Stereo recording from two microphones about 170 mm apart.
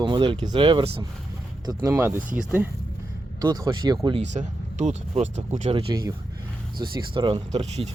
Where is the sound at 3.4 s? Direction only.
25° right (ahead or behind).